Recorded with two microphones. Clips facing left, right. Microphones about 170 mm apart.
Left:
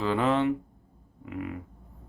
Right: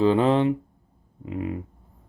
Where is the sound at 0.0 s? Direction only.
30° right (ahead or behind).